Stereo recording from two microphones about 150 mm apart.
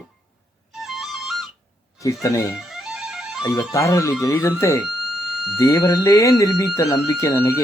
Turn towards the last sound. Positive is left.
turn(degrees=20)  # may be behind; listen again after turning